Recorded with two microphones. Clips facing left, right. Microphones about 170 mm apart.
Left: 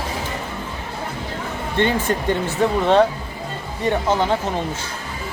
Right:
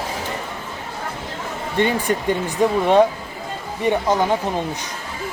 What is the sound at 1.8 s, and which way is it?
Speech, 15° right (ahead or behind).